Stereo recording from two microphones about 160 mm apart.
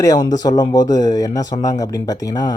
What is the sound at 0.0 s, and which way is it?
Speech, 25° left (ahead or behind).